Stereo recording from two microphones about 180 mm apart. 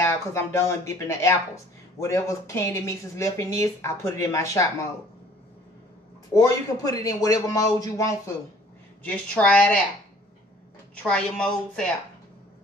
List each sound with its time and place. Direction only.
0.0 s speech: 15° left (ahead or behind)
6.3 s speech: 20° left (ahead or behind)
9.0 s speech: 5° left (ahead or behind)
11.0 s a woman's voice: 5° left (ahead or behind)